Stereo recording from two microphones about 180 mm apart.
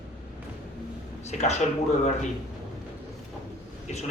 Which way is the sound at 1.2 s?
40° left (ahead or behind).